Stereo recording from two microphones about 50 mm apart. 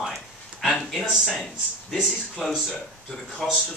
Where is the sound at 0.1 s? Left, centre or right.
Centre.